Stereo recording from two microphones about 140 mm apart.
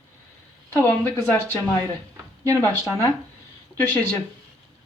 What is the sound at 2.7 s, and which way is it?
Speech, 20° left (ahead or behind).